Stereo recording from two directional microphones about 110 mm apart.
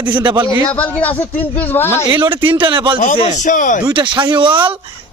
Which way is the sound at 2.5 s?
50° right (ahead or behind).